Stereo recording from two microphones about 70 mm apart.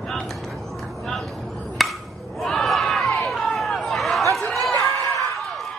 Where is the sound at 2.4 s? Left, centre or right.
Centre.